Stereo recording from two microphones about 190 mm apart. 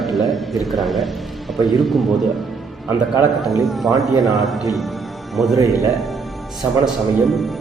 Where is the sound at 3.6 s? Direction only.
Centre (ahead or behind).